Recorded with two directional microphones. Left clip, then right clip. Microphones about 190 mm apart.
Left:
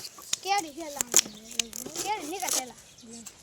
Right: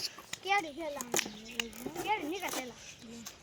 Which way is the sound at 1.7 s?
5° left (ahead or behind).